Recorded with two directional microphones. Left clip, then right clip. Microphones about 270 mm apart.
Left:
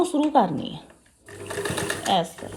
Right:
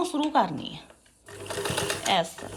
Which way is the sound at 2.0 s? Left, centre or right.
Centre.